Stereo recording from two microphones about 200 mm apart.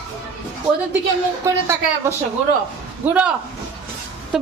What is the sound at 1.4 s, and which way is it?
A woman's voice, 15° right (ahead or behind).